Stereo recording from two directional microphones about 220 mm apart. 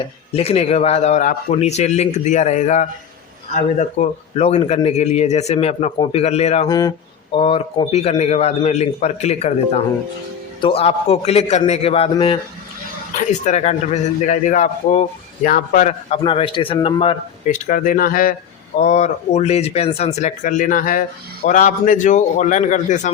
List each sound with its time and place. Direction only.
0.3 s a man's voice: 25° left (ahead or behind)
6.7 s a man's voice: 15° left (ahead or behind); by 23.1 s 35° left (ahead or behind)